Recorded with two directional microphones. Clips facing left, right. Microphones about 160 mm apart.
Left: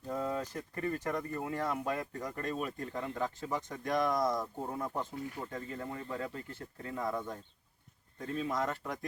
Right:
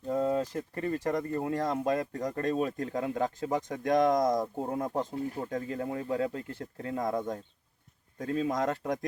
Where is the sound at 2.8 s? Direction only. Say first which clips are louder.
Right 6 dB; 55° right (ahead or behind).